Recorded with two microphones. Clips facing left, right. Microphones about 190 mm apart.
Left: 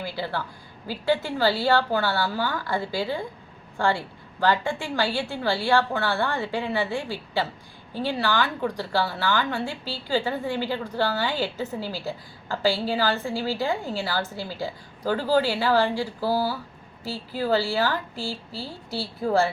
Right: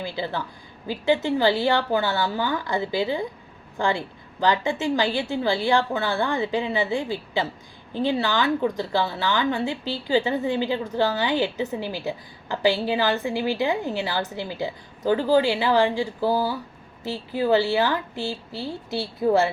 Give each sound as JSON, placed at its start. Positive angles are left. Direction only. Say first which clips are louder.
{"t": 0.0, "sound": "a woman's voice", "louder": "right 1 dB", "side_deg": -20}